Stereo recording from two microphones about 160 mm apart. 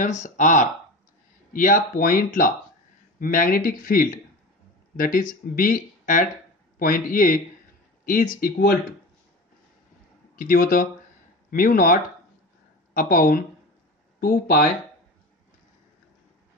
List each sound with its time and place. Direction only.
0.0 s speech: 50° left (ahead or behind); by 8.7 s 70° left (ahead or behind)
10.3 s speech: 60° left (ahead or behind)